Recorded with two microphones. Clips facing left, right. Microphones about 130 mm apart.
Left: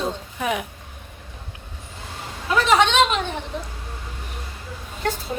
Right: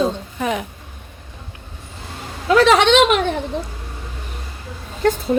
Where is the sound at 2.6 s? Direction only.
80° right.